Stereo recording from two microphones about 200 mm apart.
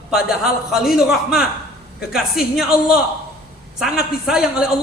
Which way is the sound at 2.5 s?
5° right (ahead or behind).